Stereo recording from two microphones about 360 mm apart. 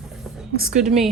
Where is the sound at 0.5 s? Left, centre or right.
Right.